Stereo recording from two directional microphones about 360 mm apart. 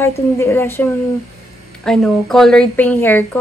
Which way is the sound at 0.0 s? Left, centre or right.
Centre.